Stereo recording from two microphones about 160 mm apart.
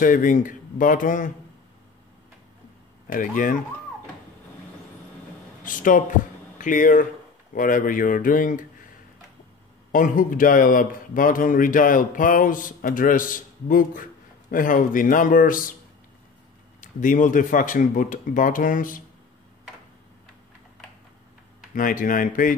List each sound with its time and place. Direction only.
0.0 s speech: 55° left (ahead or behind)
3.1 s speech: 55° left (ahead or behind)
5.6 s speech: 55° left (ahead or behind)
9.9 s speech: 55° left (ahead or behind)
16.8 s speech: 55° left (ahead or behind)
21.7 s speech: 55° left (ahead or behind)